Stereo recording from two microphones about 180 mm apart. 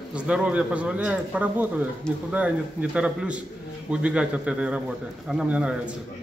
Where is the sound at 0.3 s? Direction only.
5° right (ahead or behind).